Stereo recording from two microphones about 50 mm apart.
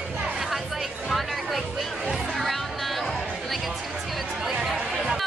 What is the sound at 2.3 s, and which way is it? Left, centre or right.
Chatter, centre.